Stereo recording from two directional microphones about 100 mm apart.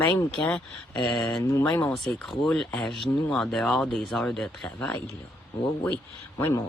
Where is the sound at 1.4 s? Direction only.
30° left (ahead or behind).